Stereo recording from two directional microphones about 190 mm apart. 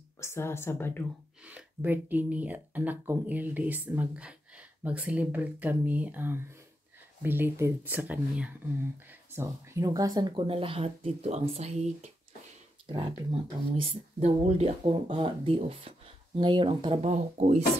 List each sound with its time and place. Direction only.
0.2 s a woman's voice: 15° left (ahead or behind)
1.4 s speech: 5° right (ahead or behind); by 17.6 s 35° right (ahead or behind)